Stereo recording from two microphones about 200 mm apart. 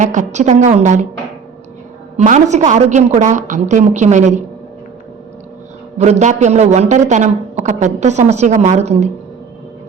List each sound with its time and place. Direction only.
0.0 s a woman's voice: 40° right (ahead or behind)
2.1 s a woman's voice: 35° right (ahead or behind)
6.0 s a woman's voice: 35° right (ahead or behind)